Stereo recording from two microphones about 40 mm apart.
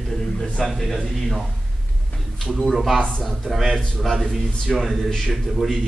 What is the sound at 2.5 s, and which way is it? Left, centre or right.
Speech, centre.